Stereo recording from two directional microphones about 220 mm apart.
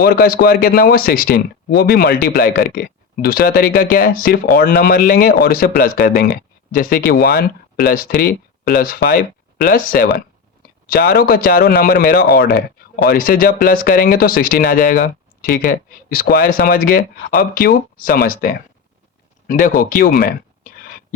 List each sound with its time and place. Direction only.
0.0 s a man's voice: 45° left (ahead or behind)